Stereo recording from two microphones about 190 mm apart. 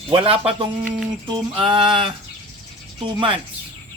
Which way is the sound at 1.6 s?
Centre (ahead or behind).